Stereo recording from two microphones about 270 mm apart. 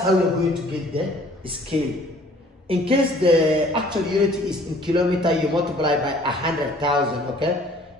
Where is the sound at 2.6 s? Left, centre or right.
Centre.